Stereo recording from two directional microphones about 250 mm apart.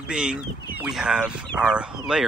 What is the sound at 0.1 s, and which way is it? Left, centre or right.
Speech, centre.